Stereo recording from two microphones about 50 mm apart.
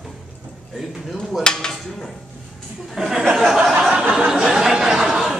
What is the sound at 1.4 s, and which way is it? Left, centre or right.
Speech, centre.